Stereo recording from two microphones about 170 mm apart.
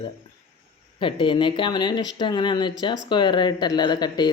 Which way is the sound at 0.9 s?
30° left (ahead or behind).